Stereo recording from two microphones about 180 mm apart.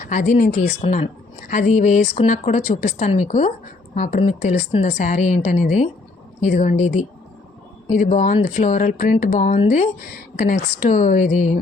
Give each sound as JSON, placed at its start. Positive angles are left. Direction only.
{"t": 0.0, "sound": "a woman's voice", "side_deg": 45}